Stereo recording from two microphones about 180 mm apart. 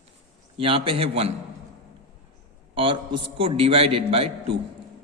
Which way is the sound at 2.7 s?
30° right (ahead or behind).